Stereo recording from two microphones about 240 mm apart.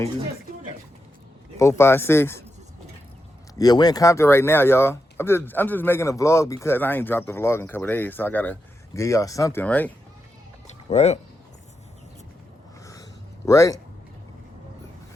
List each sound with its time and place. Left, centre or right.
1.5 s speech: centre
3.6 s speech: centre
10.8 s speech: left
12.8 s a sound: centre